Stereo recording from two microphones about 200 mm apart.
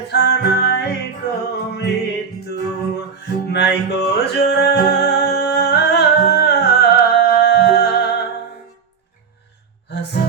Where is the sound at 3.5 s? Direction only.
55° left (ahead or behind).